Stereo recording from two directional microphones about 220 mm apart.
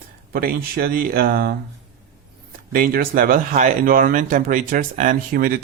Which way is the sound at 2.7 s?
40° right (ahead or behind).